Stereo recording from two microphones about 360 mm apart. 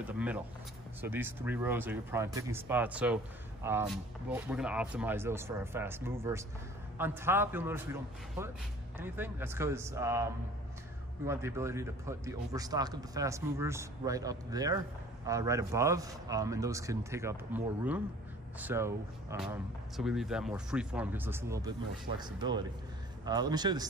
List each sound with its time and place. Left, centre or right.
0.0 s speech: centre
11.2 s speech: centre